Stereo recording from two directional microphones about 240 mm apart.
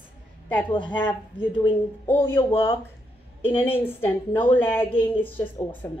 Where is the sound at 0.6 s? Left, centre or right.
Centre.